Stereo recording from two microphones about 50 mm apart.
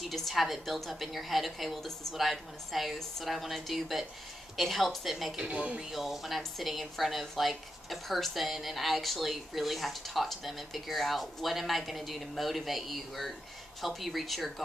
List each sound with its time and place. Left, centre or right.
0.0 s speech: centre
5.3 s speech: right
5.9 s speech: centre